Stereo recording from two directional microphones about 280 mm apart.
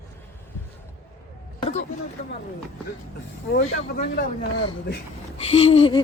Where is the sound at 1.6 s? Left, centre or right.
Left.